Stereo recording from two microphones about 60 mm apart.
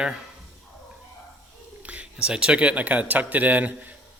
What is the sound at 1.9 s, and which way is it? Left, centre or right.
A man's voice, centre.